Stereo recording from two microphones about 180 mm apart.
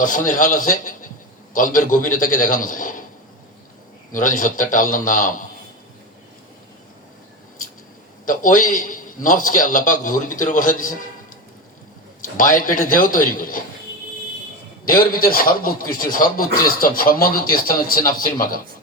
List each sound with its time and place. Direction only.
0.3 s a man's voice: 45° left (ahead or behind)
4.1 s a man's voice: 45° left (ahead or behind)
8.2 s a man's voice: 50° left (ahead or behind)
12.2 s a man's voice: 50° left (ahead or behind)
14.8 s a man's voice: 50° left (ahead or behind)